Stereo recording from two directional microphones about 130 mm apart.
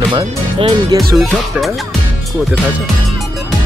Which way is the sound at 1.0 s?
Centre (ahead or behind).